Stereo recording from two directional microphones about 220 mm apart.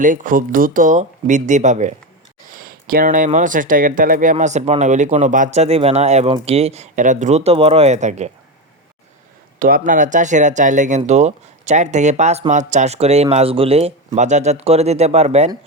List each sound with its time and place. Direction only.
0.0 s speech: 35° right (ahead or behind)
9.6 s speech: 40° right (ahead or behind)